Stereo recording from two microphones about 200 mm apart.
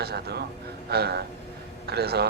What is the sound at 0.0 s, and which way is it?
A man's voice, 50° right (ahead or behind).